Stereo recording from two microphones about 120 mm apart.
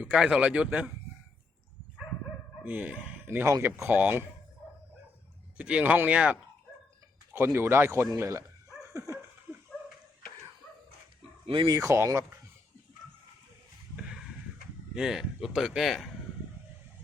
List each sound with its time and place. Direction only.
0.0 s speech: 10° right (ahead or behind)
2.6 s speech: 10° right (ahead or behind)
5.5 s speech: 10° right (ahead or behind)
7.3 s speech: 20° right (ahead or behind)
8.8 s a sound: 25° right (ahead or behind)
11.4 s speech: 40° right (ahead or behind)
11.7 s speech: 25° right (ahead or behind)
14.9 s speech: 5° right (ahead or behind)